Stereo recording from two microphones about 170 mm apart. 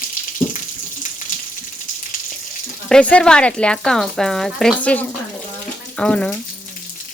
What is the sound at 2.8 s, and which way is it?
Speech, 5° left (ahead or behind).